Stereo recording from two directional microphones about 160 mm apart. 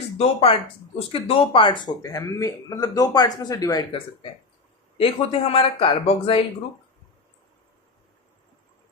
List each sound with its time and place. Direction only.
0.2 s speech: 35° left (ahead or behind)